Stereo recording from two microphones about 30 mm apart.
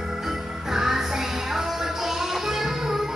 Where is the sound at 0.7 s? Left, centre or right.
Centre.